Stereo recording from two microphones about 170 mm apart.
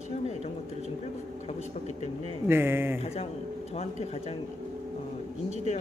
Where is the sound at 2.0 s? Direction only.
35° left (ahead or behind).